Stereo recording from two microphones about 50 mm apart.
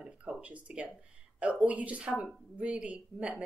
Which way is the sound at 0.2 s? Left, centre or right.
Right.